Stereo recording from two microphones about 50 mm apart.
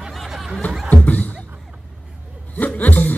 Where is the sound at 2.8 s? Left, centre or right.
Left.